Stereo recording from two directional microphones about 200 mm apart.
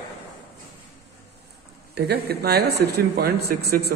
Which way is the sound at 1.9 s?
55° right (ahead or behind).